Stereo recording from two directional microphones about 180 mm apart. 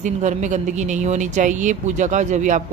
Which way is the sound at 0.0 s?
40° right (ahead or behind).